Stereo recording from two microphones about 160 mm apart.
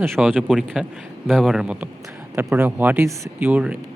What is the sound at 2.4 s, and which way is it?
Speech, 15° right (ahead or behind).